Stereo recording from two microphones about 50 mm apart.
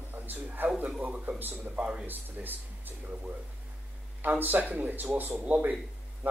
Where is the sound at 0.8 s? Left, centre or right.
Right.